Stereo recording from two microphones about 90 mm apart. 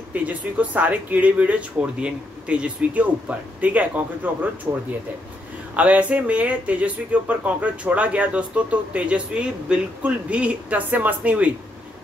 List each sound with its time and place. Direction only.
0.1 s speech: 15° right (ahead or behind)
5.8 s speech: 15° right (ahead or behind)